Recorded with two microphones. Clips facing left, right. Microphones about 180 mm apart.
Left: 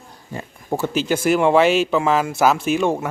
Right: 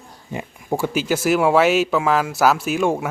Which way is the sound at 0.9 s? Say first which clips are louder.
Left 1 dB; 5° right (ahead or behind).